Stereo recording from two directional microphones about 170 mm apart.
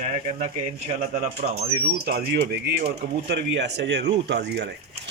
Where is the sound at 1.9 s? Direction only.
65° right (ahead or behind).